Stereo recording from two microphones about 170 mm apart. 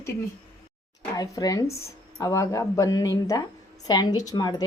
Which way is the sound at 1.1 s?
20° left (ahead or behind).